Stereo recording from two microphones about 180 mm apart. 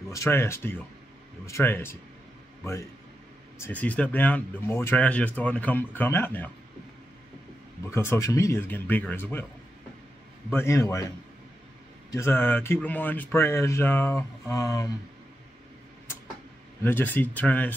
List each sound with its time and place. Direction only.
0.1 s speech: 15° left (ahead or behind)
3.5 s speech: 10° left (ahead or behind)
7.9 s speech: 15° left (ahead or behind)
10.5 s speech: 15° left (ahead or behind)
12.1 s speech: 15° left (ahead or behind)
16.8 s speech: 10° left (ahead or behind)